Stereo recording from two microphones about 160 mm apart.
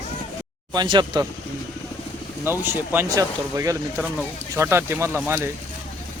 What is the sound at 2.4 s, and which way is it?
Speech, 15° right (ahead or behind).